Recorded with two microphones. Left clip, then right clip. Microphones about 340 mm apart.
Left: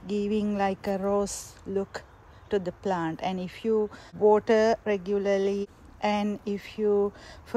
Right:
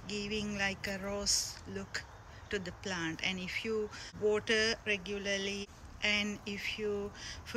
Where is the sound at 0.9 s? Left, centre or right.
Left.